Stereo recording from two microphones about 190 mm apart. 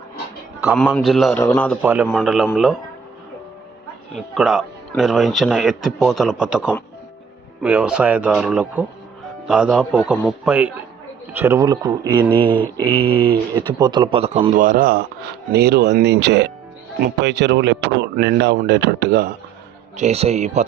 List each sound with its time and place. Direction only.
0.6 s speech: 5° right (ahead or behind)
1.8 s a man's voice: 10° right (ahead or behind)
4.1 s speech: centre (ahead or behind); by 12.3 s 20° right (ahead or behind)
12.3 s speech: 10° left (ahead or behind)
13.0 s speech: 25° right (ahead or behind)
14.3 s a man's voice: 40° right (ahead or behind)
20.0 s speech: 35° right (ahead or behind)